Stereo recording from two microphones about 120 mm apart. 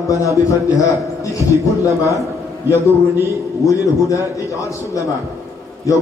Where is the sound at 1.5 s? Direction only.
25° right (ahead or behind).